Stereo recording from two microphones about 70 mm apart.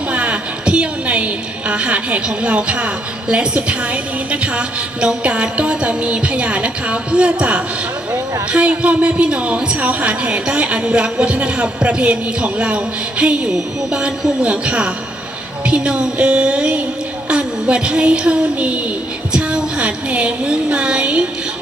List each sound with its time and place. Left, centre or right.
0.1 s a woman's voice: centre